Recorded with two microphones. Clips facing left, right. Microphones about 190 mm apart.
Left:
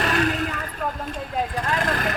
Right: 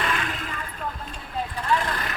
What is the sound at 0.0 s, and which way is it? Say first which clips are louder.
Vehicle: left 6 dB; 40° left (ahead or behind).